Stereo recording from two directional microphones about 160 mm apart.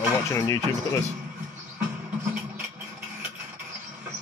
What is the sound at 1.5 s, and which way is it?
Music, 15° right (ahead or behind).